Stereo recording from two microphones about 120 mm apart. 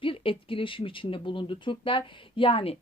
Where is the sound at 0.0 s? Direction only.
50° left (ahead or behind).